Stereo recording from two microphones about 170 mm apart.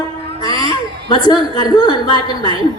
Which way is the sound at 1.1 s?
25° left (ahead or behind).